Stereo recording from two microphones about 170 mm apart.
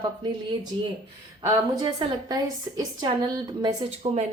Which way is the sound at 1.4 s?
20° right (ahead or behind).